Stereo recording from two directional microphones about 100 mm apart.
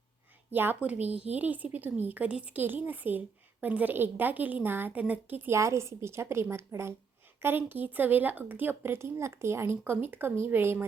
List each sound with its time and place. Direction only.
0.5 s speech: 20° right (ahead or behind)
5.5 s speech: 30° right (ahead or behind)